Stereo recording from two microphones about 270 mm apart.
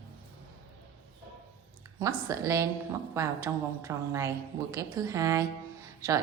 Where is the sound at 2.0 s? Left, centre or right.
Centre.